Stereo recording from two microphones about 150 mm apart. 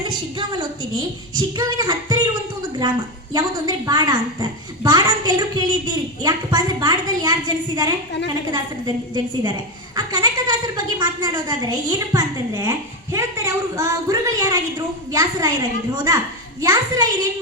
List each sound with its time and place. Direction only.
0.1 s a woman's voice: 30° right (ahead or behind)
3.3 s a woman's voice: 25° right (ahead or behind)